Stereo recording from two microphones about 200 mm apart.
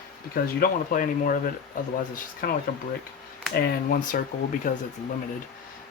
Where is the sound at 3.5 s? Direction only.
50° left (ahead or behind).